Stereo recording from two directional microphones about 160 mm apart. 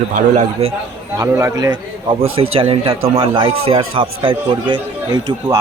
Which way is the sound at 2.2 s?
35° right (ahead or behind).